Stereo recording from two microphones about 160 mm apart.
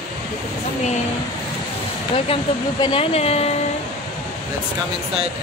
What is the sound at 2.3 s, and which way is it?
Speech, 35° left (ahead or behind).